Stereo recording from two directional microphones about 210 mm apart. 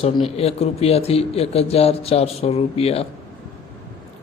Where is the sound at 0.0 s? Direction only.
30° left (ahead or behind).